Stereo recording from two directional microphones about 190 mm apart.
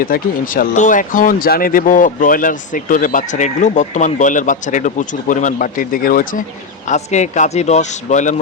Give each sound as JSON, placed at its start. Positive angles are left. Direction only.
{"t": 0.0, "sound": "speech", "side_deg": 50}
{"t": 6.8, "sound": "speech", "side_deg": 40}